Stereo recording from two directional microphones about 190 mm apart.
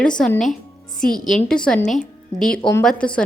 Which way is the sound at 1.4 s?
5° left (ahead or behind).